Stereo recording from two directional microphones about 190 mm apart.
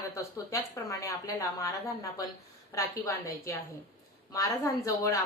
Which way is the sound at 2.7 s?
15° left (ahead or behind).